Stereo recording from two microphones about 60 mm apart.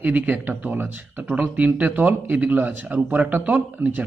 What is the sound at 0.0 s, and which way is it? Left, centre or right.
Speech, right.